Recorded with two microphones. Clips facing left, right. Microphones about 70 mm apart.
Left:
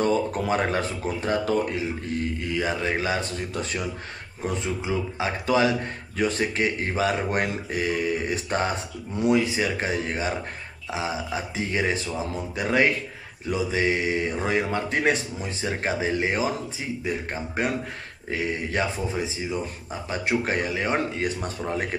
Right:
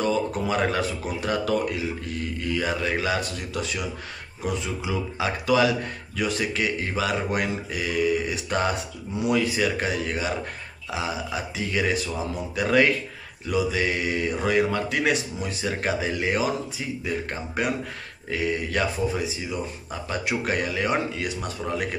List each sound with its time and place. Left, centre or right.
0.0 s a man's voice: left